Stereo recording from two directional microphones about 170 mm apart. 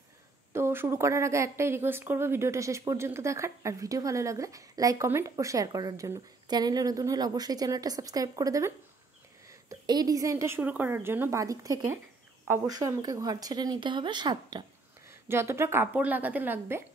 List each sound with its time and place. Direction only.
0.5 s a woman's voice: 15° right (ahead or behind)
15.0 s a woman's voice: 15° right (ahead or behind)